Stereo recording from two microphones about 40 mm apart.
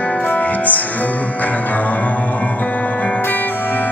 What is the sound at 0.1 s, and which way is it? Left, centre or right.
Music, left.